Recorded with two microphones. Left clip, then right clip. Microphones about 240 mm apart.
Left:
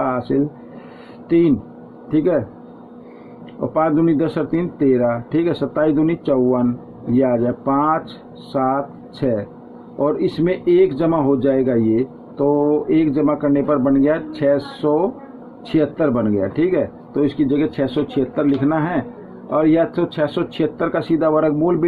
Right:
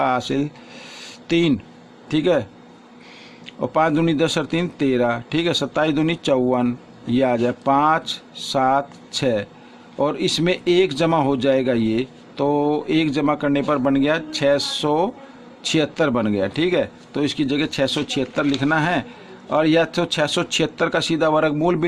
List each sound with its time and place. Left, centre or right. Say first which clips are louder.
0.0 s a sound: even; right
1.3 s a man's voice: left 4 dB; right
3.6 s a man's voice: left 2 dB; right
10.0 s a man's voice: left 2 dB; right